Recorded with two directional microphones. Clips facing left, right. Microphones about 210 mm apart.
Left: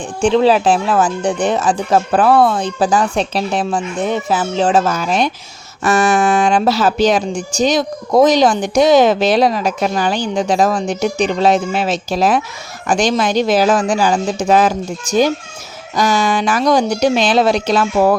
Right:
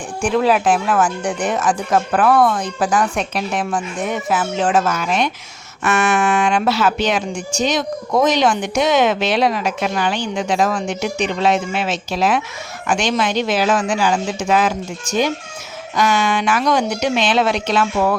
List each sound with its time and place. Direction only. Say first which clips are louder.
0.2 s speech: left 4 dB; 25° left (ahead or behind)